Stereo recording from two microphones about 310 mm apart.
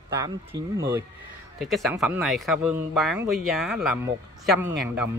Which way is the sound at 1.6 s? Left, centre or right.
Centre.